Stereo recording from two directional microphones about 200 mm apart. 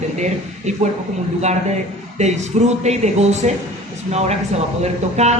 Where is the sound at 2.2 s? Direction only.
35° right (ahead or behind).